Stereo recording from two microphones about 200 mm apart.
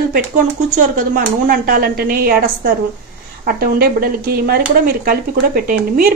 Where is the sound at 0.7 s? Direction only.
45° right (ahead or behind).